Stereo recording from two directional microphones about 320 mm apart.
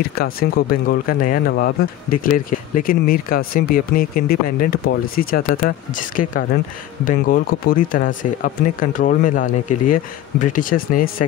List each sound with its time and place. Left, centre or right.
0.0 s speech: left